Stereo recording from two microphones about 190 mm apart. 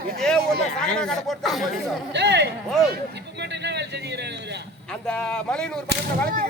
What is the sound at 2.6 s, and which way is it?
Speech, centre (ahead or behind).